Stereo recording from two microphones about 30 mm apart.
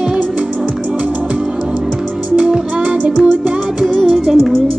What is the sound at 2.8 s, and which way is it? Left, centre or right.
Music, right.